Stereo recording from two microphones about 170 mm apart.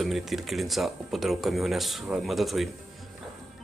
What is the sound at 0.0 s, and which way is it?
Speech, centre (ahead or behind).